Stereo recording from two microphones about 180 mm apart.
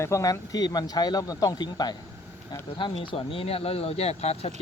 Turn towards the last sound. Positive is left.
turn(degrees=35)  # may be behind; listen again after turning